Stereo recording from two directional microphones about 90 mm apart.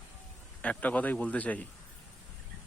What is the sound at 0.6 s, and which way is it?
Speech, 15° left (ahead or behind).